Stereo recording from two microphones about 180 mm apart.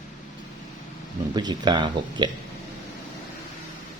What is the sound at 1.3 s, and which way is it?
Speech, 25° right (ahead or behind).